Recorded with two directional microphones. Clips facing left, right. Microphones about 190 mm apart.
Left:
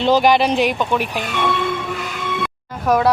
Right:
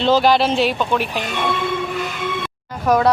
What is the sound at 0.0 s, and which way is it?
A woman's voice, 15° left (ahead or behind).